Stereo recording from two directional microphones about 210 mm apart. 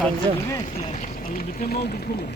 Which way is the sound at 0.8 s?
35° left (ahead or behind).